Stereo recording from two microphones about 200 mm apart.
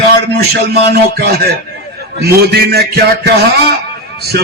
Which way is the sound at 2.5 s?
55° right (ahead or behind).